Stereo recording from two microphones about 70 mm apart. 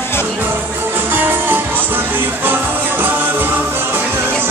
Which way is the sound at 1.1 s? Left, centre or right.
Right.